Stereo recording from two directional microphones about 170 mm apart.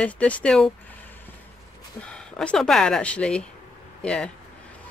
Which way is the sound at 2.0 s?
5° left (ahead or behind).